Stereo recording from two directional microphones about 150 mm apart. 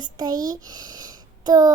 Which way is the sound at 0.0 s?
25° right (ahead or behind).